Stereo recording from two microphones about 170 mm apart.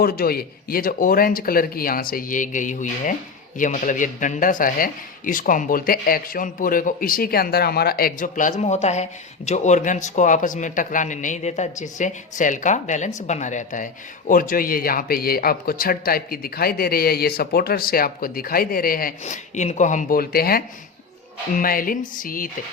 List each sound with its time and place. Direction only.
0.0 s a man's voice: 60° left (ahead or behind)